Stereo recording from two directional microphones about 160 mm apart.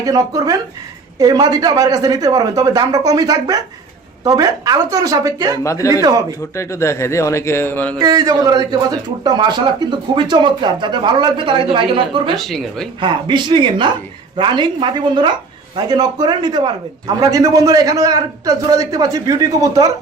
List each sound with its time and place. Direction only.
0.0 s speech: 20° right (ahead or behind)
5.6 s speech: 20° left (ahead or behind)
6.0 s speech: 20° right (ahead or behind)
6.6 s speech: 20° left (ahead or behind)
7.9 s speech: 25° right (ahead or behind)
12.4 s speech: centre (ahead or behind)
13.0 s speech: 30° right (ahead or behind)